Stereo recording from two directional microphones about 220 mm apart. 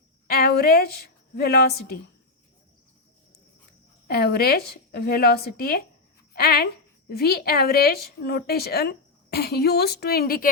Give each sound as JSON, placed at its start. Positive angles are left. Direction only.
{"t": 0.3, "sound": "a woman's voice", "side_deg": 45}
{"t": 4.1, "sound": "a woman's voice", "side_deg": 45}